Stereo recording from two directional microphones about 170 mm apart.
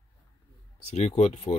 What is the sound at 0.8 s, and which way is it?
Speech, 40° left (ahead or behind).